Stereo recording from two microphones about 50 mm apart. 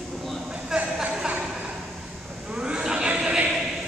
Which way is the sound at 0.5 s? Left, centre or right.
Right.